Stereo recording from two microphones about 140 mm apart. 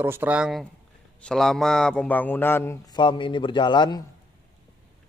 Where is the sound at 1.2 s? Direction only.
5° left (ahead or behind).